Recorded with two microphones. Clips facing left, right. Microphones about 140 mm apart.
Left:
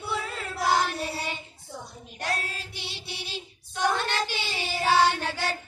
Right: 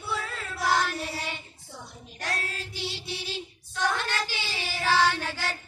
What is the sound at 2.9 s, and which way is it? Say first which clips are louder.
Music: right 3 dB; 20° left (ahead or behind).